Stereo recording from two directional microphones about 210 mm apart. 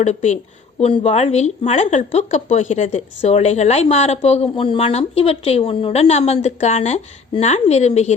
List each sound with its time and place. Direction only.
0.0 s a woman's voice: 30° left (ahead or behind)